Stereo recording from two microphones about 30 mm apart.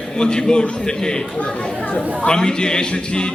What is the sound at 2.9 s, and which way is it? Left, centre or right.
A capella, left.